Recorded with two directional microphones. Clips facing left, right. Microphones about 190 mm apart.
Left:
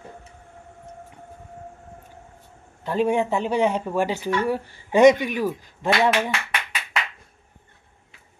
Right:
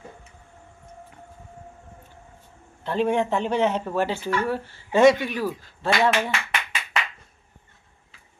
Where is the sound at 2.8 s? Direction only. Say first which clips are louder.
Left 1 dB; 10° left (ahead or behind).